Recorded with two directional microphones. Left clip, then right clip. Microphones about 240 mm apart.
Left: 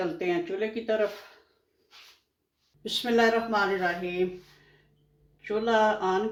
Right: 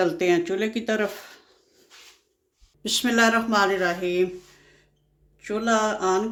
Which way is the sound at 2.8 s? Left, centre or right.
Right.